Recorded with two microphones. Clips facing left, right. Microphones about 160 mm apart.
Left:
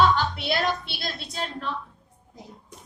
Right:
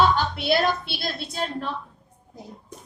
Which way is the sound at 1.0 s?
30° right (ahead or behind).